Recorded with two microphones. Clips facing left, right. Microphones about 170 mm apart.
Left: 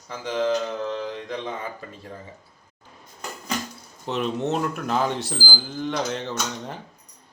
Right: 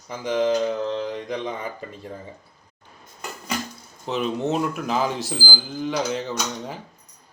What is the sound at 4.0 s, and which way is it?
Speech, centre (ahead or behind).